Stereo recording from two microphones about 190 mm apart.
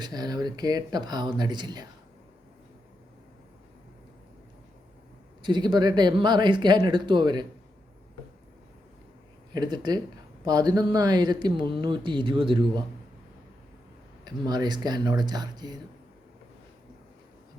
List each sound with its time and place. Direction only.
0.0 s speech: 20° right (ahead or behind)
5.4 s speech: 25° right (ahead or behind)
9.5 s speech: 20° right (ahead or behind)
14.3 s speech: 20° right (ahead or behind)